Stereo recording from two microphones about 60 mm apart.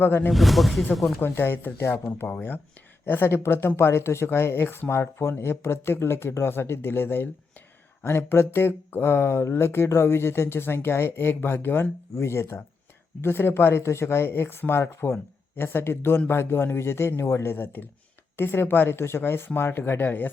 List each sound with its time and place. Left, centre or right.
0.0 s speech: left
0.3 s speech: centre
1.2 s speech: left
3.1 s speech: left